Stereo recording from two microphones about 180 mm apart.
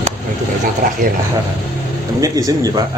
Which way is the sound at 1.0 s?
45° right (ahead or behind).